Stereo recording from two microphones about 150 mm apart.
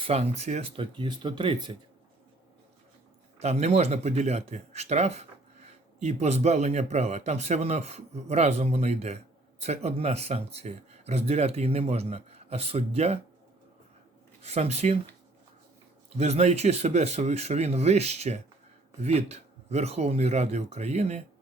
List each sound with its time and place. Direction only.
0.0 s speech: 45° right (ahead or behind)
3.3 s speech: 45° right (ahead or behind)
14.4 s speech: 45° right (ahead or behind)
16.1 s speech: 45° right (ahead or behind)